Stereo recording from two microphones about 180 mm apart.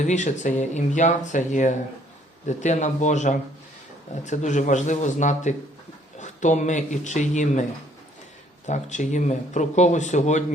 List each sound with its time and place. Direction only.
0.1 s speech: 40° left (ahead or behind)
8.6 s speech: 40° left (ahead or behind)